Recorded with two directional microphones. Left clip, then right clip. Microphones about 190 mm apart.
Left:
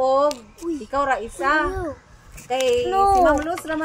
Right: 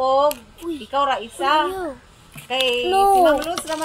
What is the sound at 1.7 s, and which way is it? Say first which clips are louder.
Speech: right 1 dB; 15° left (ahead or behind).